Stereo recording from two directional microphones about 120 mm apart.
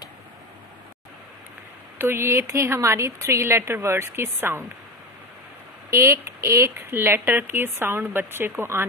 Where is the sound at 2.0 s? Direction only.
20° right (ahead or behind).